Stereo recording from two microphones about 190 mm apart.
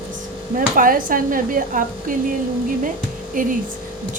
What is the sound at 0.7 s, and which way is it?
Music, 45° right (ahead or behind).